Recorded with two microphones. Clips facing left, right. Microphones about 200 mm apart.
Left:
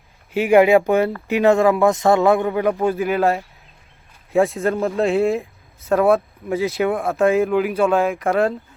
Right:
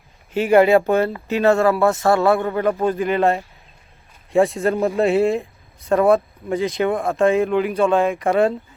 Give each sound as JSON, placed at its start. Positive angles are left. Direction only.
{"t": 0.3, "sound": "speech", "side_deg": 10}